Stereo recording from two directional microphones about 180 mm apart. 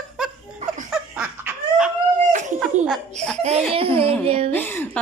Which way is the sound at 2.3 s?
40° right (ahead or behind).